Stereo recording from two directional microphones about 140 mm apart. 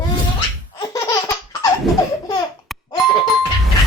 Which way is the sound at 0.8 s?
25° left (ahead or behind).